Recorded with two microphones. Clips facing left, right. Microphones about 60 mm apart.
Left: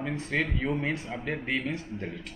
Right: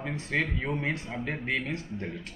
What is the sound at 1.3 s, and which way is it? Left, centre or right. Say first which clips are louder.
Speech: left 1 dB; centre.